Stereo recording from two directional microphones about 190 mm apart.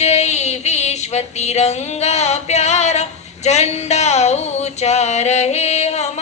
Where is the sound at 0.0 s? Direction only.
35° left (ahead or behind).